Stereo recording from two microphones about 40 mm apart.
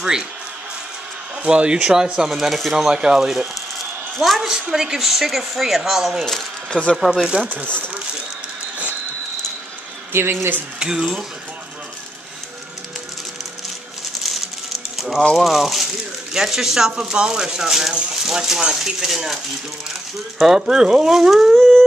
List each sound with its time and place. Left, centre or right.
0.0 s speech: centre
1.4 s speech: right
2.2 s speech: centre
2.5 s speech: centre
2.9 s speech: centre
3.7 s a sound: centre
4.4 s speech: centre
6.7 s speech: left
7.2 s speech: right
10.1 s speech: right
10.8 s speech: centre
15.0 s speech: centre
20.4 s speech: centre